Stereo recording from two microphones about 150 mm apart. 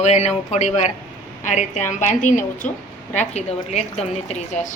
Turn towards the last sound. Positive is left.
turn(degrees=45)  # may be behind; listen again after turning